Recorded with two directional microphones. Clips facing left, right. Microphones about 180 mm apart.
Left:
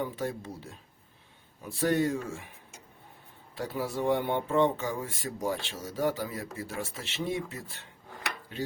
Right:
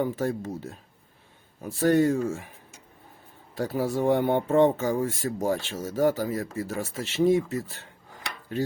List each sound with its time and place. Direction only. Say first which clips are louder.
0.0 s speech: right 6 dB; 45° right (ahead or behind)
3.5 s speech: right 6 dB; 45° right (ahead or behind)